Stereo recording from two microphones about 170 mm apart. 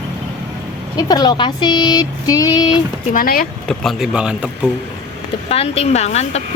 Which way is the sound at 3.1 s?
55° left (ahead or behind).